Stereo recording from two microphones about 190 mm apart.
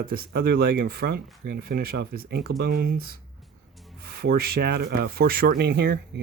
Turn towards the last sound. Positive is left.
turn(degrees=-55)  # may be behind; listen again after turning